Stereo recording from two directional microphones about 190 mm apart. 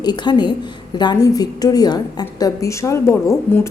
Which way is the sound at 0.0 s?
20° left (ahead or behind).